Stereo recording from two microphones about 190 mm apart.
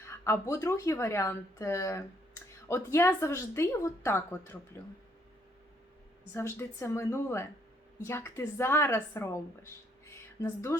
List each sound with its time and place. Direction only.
0.1 s speech: 15° left (ahead or behind)
6.3 s speech: 15° left (ahead or behind)
10.1 s a sound: 15° left (ahead or behind)